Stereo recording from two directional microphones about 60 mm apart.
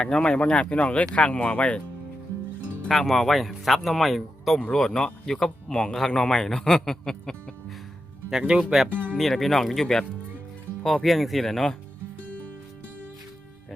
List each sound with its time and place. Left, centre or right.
0.0 s speech: centre
2.9 s speech: centre
4.6 s speech: centre
8.3 s speech: centre
9.1 s speech: centre